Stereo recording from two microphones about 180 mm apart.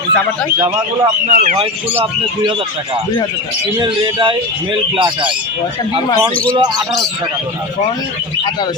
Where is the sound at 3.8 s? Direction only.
25° right (ahead or behind).